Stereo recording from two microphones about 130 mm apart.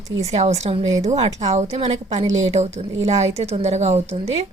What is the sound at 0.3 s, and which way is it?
Speech, 60° right (ahead or behind).